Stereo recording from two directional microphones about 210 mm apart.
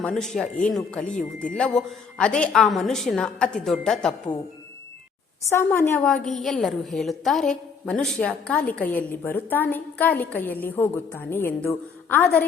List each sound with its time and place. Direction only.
0.0 s a woman's voice: 5° left (ahead or behind)
1.1 s speech: 40° left (ahead or behind)
1.5 s a woman's voice: 5° left (ahead or behind)
5.5 s a woman's voice: 10° left (ahead or behind)